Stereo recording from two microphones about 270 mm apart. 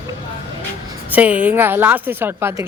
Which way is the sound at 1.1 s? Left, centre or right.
Centre.